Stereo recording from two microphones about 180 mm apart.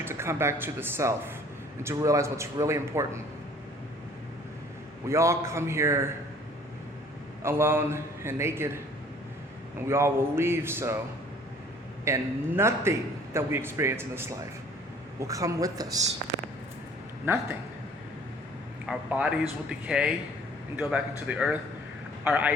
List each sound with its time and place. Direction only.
0.0 s a man's voice: 15° right (ahead or behind)
5.0 s a man's voice: 15° right (ahead or behind)
7.4 s a man's voice: 15° right (ahead or behind)
9.9 s a man's voice: 15° right (ahead or behind)
12.0 s a man's voice: 15° right (ahead or behind)
17.2 s a man's voice: 10° right (ahead or behind)
18.9 s a man's voice: 5° right (ahead or behind)